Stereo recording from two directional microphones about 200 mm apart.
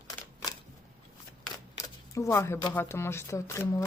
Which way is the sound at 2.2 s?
15° left (ahead or behind).